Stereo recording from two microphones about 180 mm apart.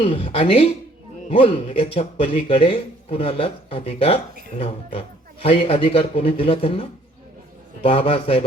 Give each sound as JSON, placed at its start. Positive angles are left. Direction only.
{"t": 0.0, "sound": "speech", "side_deg": 35}